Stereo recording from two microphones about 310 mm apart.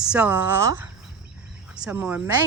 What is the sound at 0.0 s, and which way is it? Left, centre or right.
Speech, centre.